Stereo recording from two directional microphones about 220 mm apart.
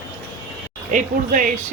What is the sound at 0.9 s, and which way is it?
Speech, 35° right (ahead or behind).